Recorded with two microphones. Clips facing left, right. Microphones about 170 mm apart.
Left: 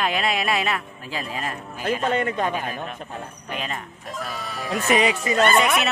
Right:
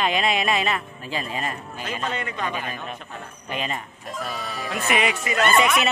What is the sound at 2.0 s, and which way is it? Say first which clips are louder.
Speech: left 5 dB; 50° left (ahead or behind).